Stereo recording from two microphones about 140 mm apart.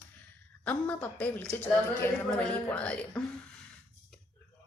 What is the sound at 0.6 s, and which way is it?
Speech, 10° left (ahead or behind).